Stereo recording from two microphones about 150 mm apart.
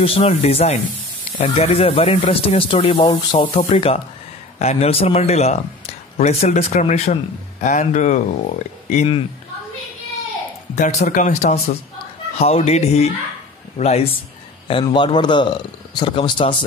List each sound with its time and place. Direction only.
0.0 s speech: 40° left (ahead or behind)
10.8 s speech: 55° left (ahead or behind)
14.7 s speech: 35° left (ahead or behind)